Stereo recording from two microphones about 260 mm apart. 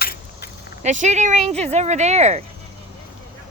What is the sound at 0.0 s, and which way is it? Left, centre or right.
Keys jangling, left.